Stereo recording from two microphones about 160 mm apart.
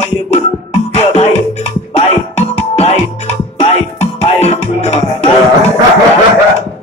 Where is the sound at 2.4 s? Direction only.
45° left (ahead or behind).